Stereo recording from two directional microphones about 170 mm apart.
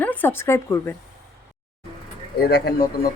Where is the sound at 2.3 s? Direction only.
70° left (ahead or behind).